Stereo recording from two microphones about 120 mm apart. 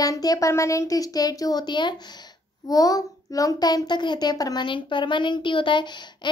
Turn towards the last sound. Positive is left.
turn(degrees=40)  # may be behind; listen again after turning